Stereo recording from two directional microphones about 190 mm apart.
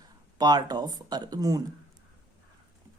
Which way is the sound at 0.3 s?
20° right (ahead or behind).